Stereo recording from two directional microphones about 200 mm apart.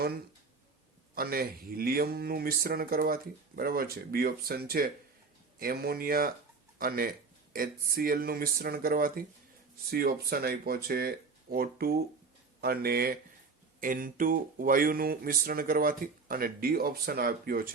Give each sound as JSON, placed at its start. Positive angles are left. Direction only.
{"t": 1.1, "sound": "speech", "side_deg": -50}